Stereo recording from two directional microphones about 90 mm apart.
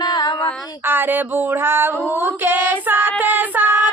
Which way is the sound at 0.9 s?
20° right (ahead or behind).